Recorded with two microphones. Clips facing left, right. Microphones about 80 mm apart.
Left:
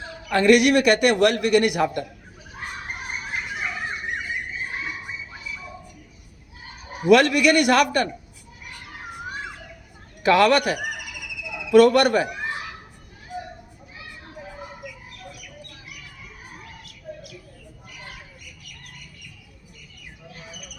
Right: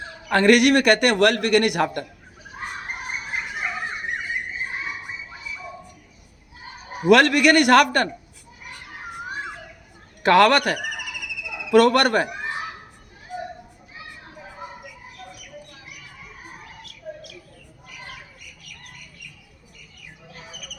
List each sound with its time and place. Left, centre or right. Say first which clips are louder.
0.3 s a man's voice: even; right
7.1 s a man's voice: right 1 dB; right
10.2 s speech: right 1 dB; right